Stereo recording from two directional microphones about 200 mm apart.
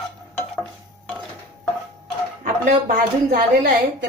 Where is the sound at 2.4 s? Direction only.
40° right (ahead or behind).